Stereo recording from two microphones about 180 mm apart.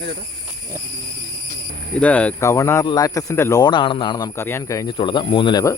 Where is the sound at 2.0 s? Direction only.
5° left (ahead or behind).